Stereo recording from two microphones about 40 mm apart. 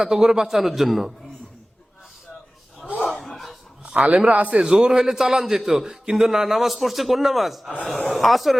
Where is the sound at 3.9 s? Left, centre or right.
Right.